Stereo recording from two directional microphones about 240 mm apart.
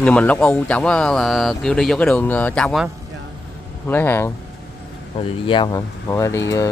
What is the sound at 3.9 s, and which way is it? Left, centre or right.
Speech, centre.